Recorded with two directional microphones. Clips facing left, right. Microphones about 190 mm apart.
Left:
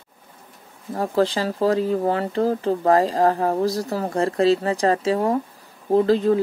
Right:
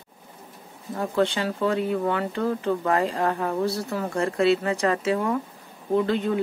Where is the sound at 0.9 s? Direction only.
35° left (ahead or behind).